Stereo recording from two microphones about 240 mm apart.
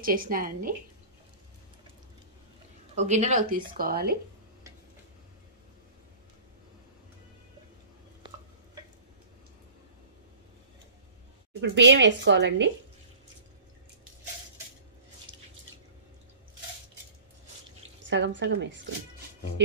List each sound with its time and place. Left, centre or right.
0.0 s a woman's voice: right
3.0 s a woman's voice: right
11.6 s speech: right
15.3 s drip: centre
18.1 s speech: right